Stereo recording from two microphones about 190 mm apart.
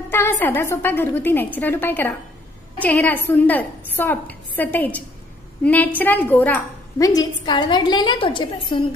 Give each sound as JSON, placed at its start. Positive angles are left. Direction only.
{"t": 0.1, "sound": "a woman's voice", "side_deg": 10}
{"t": 7.1, "sound": "a woman's voice", "side_deg": 20}